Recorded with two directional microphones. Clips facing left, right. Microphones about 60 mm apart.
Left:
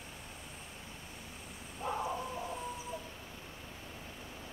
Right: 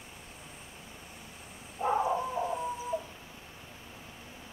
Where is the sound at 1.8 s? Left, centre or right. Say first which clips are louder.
Right 8 dB; right.